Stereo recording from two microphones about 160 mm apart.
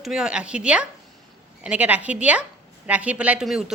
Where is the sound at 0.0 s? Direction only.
5° right (ahead or behind).